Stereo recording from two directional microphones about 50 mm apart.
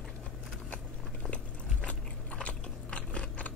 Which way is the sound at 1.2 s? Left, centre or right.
Left.